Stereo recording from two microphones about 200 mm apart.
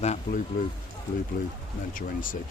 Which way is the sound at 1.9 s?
45° left (ahead or behind).